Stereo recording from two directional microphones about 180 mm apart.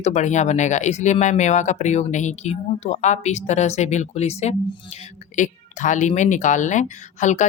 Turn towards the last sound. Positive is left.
turn(degrees=40)  # may be behind; listen again after turning